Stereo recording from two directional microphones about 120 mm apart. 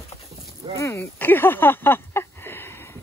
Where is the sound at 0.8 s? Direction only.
20° left (ahead or behind).